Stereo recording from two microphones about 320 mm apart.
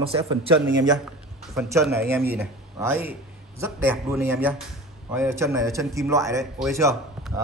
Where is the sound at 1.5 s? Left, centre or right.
Centre.